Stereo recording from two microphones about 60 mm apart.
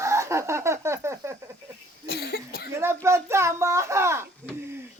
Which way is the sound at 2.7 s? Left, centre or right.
Right.